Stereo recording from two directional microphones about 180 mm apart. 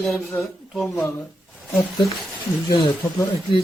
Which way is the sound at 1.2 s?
Centre (ahead or behind).